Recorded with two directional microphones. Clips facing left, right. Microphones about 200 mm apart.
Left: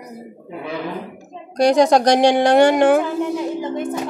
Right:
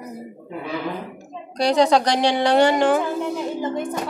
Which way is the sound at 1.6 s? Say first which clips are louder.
Left 3 dB; 45° left (ahead or behind).